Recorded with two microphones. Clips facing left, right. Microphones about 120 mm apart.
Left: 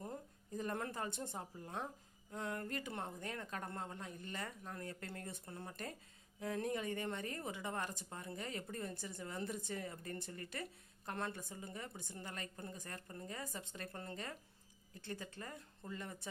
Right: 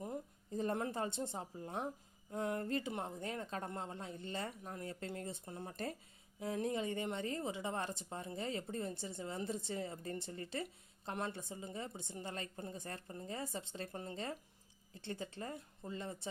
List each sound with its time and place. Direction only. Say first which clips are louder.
0.5 s speech: right 4 dB; 25° right (ahead or behind)